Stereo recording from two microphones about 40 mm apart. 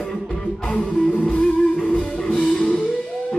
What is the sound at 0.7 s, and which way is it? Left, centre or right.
Music, left.